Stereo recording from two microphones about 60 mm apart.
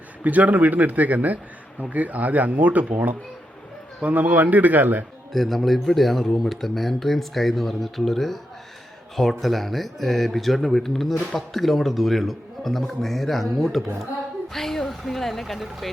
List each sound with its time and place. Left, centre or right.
0.2 s speech: right
5.3 s speech: centre
9.4 s speech: centre
14.5 s a sound: centre